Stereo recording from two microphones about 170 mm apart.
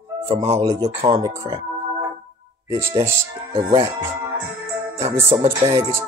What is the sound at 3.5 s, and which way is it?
Speech, 30° right (ahead or behind).